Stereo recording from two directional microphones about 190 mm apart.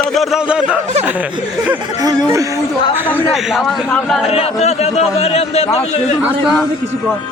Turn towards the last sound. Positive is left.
turn(degrees=0)  # may be behind; listen again after turning